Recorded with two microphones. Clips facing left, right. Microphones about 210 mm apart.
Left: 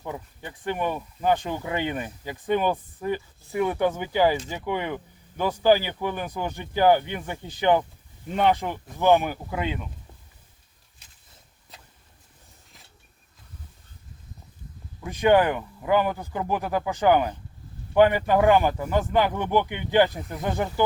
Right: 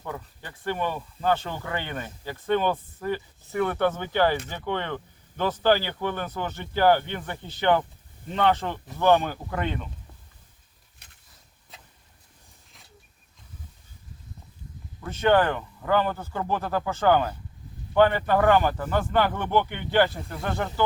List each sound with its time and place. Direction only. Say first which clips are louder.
0.0 s speech: left 2 dB; 15° left (ahead or behind)
11.0 s a sound: right 2 dB; 60° right (ahead or behind)
11.7 s boat: even; centre (ahead or behind)
15.0 s speech: left 2 dB; 15° left (ahead or behind)